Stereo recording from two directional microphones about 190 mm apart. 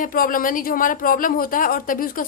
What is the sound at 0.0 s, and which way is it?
A woman's voice, 45° left (ahead or behind).